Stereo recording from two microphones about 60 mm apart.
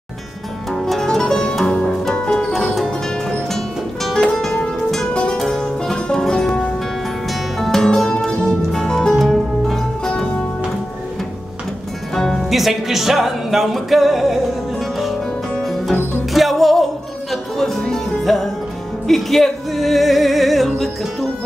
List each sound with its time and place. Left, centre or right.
0.7 s music: centre
12.1 s music: centre
12.4 s speech: centre
15.5 s music: centre